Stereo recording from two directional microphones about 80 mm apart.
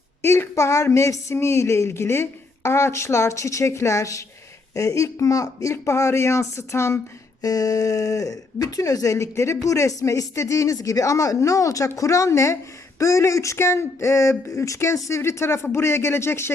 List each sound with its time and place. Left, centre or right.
0.2 s speech: left
7.4 s speech: left